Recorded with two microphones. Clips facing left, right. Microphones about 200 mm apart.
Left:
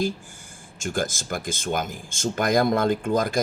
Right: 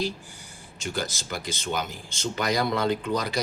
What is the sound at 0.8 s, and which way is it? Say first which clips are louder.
Speech: left 4 dB; 50° left (ahead or behind).